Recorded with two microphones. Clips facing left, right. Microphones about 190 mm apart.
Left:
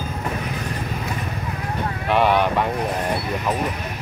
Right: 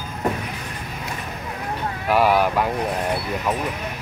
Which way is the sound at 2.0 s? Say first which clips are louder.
Even; 5° right (ahead or behind).